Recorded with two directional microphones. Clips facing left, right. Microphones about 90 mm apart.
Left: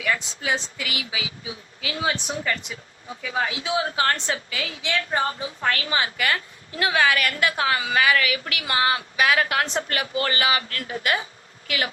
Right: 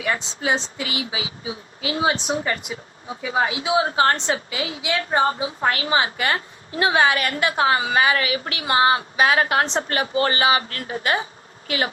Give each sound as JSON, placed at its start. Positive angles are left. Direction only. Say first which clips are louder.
{"t": 0.0, "sound": "a woman's voice", "louder": "right 2 dB", "side_deg": -25}